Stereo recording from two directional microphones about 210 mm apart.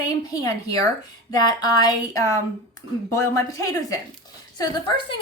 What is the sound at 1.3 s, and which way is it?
A woman's voice, 20° left (ahead or behind).